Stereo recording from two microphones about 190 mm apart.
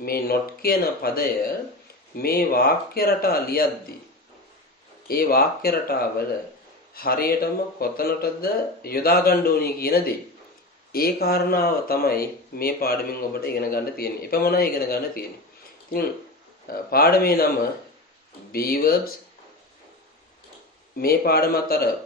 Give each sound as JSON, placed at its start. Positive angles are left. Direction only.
{"t": 0.0, "sound": "a man's voice", "side_deg": 50}
{"t": 5.0, "sound": "a man's voice", "side_deg": 50}
{"t": 16.6, "sound": "a man's voice", "side_deg": 50}
{"t": 18.5, "sound": "a man's voice", "side_deg": 50}
{"t": 21.0, "sound": "a man's voice", "side_deg": 55}